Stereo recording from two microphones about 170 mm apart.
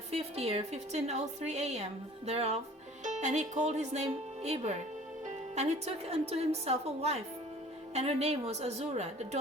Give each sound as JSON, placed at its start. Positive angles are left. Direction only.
{"t": 0.1, "sound": "a woman's voice", "side_deg": -35}